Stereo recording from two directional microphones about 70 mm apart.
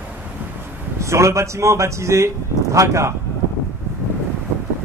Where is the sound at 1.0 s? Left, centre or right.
Right.